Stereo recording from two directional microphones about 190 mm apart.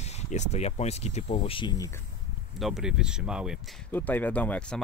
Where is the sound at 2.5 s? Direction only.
Centre (ahead or behind).